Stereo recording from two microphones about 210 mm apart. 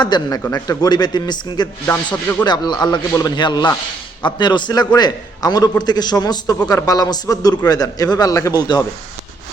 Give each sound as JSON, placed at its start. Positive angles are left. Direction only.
{"t": 0.0, "sound": "a man's voice", "side_deg": 20}